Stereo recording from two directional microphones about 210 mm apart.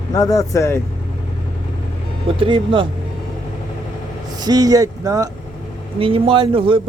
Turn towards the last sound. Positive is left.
turn(degrees=-25)  # may be behind; listen again after turning